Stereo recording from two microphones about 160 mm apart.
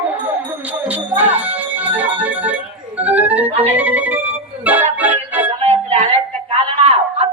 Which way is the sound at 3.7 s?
10° right (ahead or behind).